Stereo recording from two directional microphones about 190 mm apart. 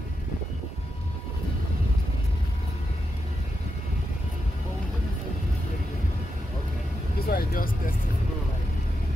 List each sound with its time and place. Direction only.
7.2 s speech: 50° left (ahead or behind)